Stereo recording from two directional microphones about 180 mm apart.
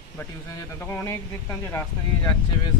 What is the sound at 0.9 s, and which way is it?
Speech, 10° left (ahead or behind).